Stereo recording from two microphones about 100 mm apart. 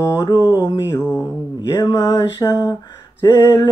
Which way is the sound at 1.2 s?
35° left (ahead or behind).